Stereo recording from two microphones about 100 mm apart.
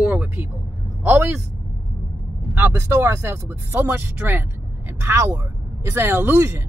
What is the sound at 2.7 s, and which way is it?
Speech, 30° right (ahead or behind).